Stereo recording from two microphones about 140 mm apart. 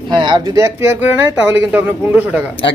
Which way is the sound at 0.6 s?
20° right (ahead or behind).